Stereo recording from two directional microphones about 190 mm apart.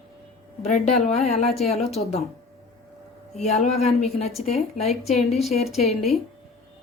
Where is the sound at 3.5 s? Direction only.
40° left (ahead or behind).